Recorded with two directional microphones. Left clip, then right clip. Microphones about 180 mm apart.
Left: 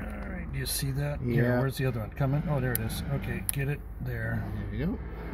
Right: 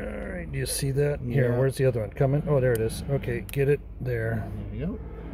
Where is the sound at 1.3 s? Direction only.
45° right (ahead or behind).